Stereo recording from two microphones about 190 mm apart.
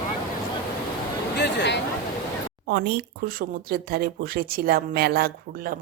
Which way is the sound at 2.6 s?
60° right (ahead or behind).